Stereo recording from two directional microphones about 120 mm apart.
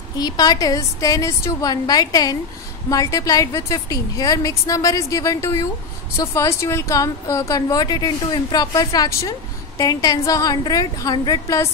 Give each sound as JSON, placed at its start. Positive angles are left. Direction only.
{"t": 0.2, "sound": "a woman's voice", "side_deg": 35}